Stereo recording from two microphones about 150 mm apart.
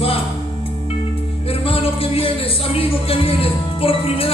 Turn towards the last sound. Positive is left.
turn(degrees=40)  # may be behind; listen again after turning